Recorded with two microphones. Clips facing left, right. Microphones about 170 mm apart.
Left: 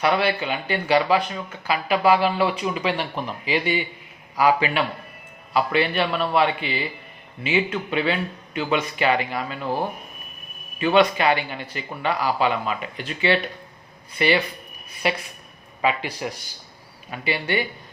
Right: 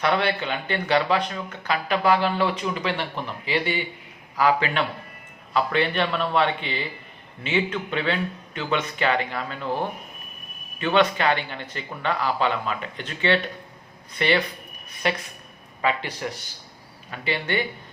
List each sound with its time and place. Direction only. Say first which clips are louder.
0.0 s speech: left 2 dB; 10° left (ahead or behind)
10.8 s speech: left 3 dB; 10° left (ahead or behind)